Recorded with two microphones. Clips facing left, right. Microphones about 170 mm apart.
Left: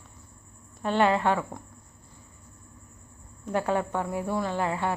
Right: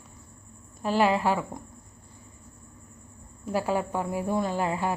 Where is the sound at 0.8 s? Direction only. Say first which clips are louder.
Even; 10° right (ahead or behind).